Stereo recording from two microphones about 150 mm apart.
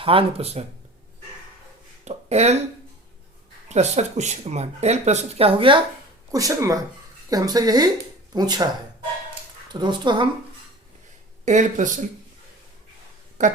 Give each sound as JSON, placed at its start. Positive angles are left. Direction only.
{"t": 0.0, "sound": "speech", "side_deg": -35}
{"t": 2.0, "sound": "speech", "side_deg": -45}
{"t": 3.7, "sound": "speech", "side_deg": -50}
{"t": 6.3, "sound": "speech", "side_deg": -20}
{"t": 9.7, "sound": "speech", "side_deg": -30}
{"t": 11.4, "sound": "speech", "side_deg": -55}
{"t": 13.4, "sound": "speech", "side_deg": -55}